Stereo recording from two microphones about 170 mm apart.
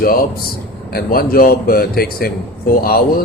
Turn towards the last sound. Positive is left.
turn(degrees=65)  # may be behind; listen again after turning